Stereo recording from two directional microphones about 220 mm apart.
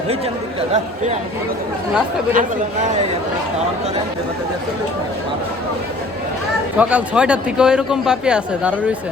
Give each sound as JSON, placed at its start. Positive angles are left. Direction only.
{"t": 2.3, "sound": "speech", "side_deg": -35}
{"t": 6.7, "sound": "a man's voice", "side_deg": -5}